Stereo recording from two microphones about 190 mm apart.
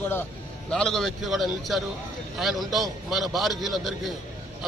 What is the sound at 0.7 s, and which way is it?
A man's voice, 5° left (ahead or behind).